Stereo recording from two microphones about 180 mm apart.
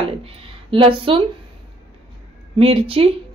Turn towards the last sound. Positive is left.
turn(degrees=-30)  # may be behind; listen again after turning